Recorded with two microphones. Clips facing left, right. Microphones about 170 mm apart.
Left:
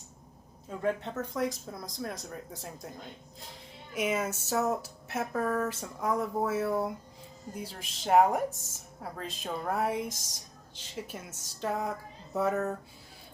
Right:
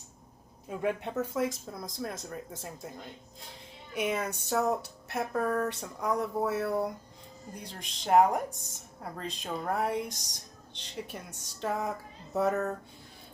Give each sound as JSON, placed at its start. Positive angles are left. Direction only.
{"t": 0.8, "sound": "speech", "side_deg": -10}